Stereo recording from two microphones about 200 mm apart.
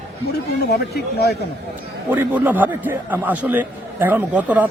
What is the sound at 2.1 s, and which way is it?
A man's voice, 10° right (ahead or behind).